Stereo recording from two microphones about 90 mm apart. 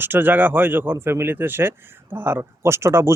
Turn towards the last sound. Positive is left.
turn(degrees=-30)  # may be behind; listen again after turning